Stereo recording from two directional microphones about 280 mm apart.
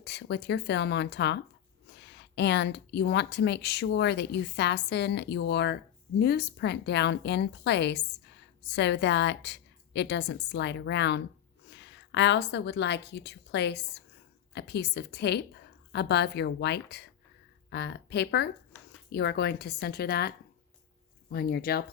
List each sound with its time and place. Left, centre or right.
0.0 s a woman's voice: left